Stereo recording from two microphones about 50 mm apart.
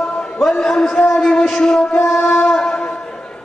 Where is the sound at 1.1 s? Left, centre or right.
Centre.